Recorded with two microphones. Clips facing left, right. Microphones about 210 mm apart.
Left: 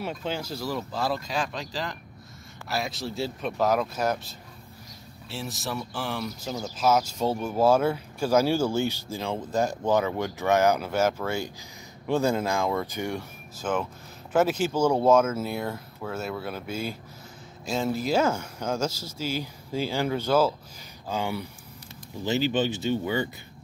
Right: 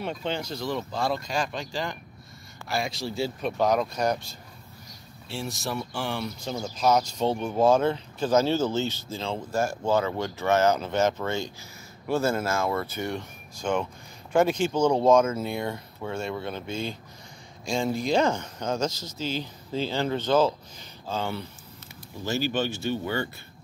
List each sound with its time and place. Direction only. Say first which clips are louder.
0.0 s speech: right 1 dB; 5° left (ahead or behind)